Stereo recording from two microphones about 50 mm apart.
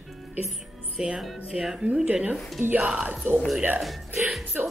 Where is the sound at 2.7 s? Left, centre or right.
Right.